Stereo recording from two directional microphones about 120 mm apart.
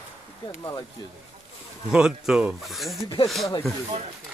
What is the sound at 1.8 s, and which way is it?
Speech, 5° right (ahead or behind).